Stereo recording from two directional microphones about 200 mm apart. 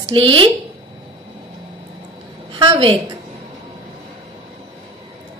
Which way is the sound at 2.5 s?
25° right (ahead or behind).